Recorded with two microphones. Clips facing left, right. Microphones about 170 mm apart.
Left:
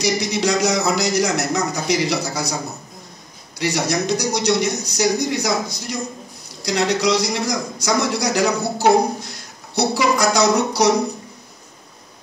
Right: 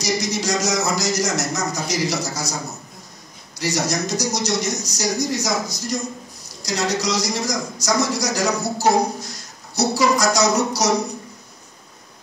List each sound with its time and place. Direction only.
0.0 s a man's voice: 60° left (ahead or behind)
3.5 s a man's voice: 60° left (ahead or behind)